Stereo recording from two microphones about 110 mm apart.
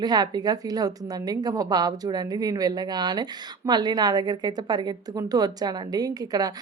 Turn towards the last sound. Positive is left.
turn(degrees=-35)  # may be behind; listen again after turning